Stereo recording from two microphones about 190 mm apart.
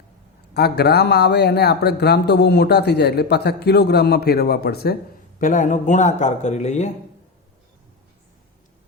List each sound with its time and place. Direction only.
0.5 s a man's voice: 55° left (ahead or behind)
5.4 s speech: 40° left (ahead or behind)